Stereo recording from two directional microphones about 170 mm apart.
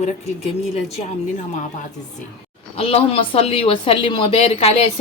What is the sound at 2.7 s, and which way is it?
Speech, 35° left (ahead or behind).